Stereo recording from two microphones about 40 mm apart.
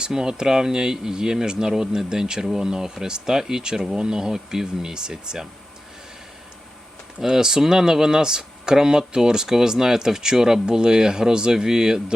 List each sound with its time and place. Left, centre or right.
0.0 s speech: centre
7.2 s speech: centre